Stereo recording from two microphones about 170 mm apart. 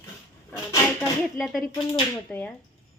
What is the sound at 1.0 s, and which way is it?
A woman's voice, centre (ahead or behind).